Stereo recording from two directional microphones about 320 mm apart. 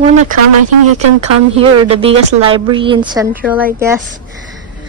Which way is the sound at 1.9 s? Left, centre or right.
Centre.